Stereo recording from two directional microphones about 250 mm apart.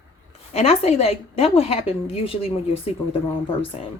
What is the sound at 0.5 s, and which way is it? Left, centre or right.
A woman's voice, left.